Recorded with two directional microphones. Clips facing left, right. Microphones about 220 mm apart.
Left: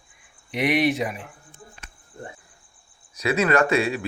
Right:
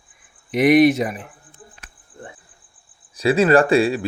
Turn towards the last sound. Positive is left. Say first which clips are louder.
# right 6 dB
turn(degrees=-30)  # may be behind; listen again after turning